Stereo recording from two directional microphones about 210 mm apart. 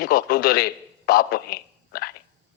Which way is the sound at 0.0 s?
45° left (ahead or behind).